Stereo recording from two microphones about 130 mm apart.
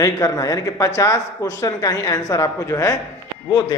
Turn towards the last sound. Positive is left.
turn(degrees=30)  # may be behind; listen again after turning